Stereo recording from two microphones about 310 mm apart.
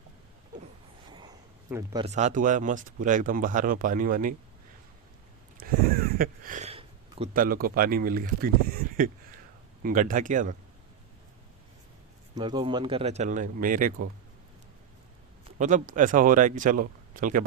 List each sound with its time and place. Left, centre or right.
1.1 s speech: centre
5.5 s a sound: right
9.8 s speech: right
12.3 s speech: centre
15.4 s speech: right